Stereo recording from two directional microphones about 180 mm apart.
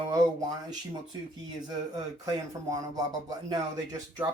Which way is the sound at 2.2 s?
20° right (ahead or behind).